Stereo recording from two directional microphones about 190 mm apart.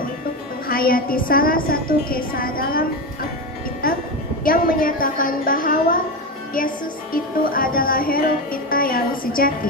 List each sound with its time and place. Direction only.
0.7 s a woman's voice: 50° left (ahead or behind)
3.8 s a woman's voice: 50° left (ahead or behind)
7.1 s a woman's voice: 50° left (ahead or behind)